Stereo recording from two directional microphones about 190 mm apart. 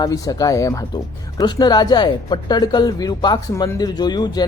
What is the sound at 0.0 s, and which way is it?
Speech, 20° left (ahead or behind).